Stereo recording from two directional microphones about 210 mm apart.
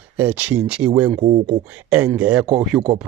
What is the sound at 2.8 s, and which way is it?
Speech, 20° right (ahead or behind).